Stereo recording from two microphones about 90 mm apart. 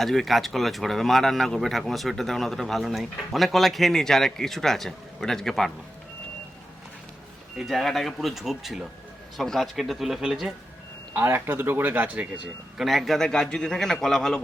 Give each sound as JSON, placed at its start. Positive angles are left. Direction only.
{"t": 0.0, "sound": "speech", "side_deg": 5}
{"t": 7.5, "sound": "speech", "side_deg": -5}
{"t": 11.1, "sound": "a man's voice", "side_deg": -25}
{"t": 12.8, "sound": "a man's voice", "side_deg": 0}